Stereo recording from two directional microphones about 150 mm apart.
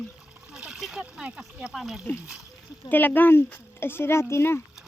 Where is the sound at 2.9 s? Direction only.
10° left (ahead or behind).